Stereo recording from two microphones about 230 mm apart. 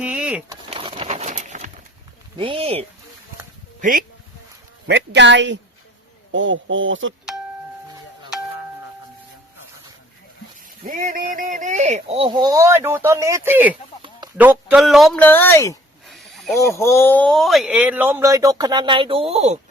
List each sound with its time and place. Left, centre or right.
0.0 s a sound: centre
0.5 s a sound: right
2.3 s speech: right
3.8 s speech: right
4.9 s speech: right
10.8 s speech: right; by 15.8 s centre
16.0 s snake: centre
16.6 s speech: centre; by 19.5 s right